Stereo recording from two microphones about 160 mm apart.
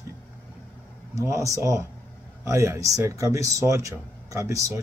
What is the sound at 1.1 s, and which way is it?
Speech, 20° right (ahead or behind).